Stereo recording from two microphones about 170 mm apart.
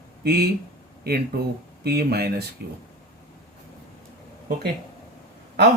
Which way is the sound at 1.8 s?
70° right (ahead or behind).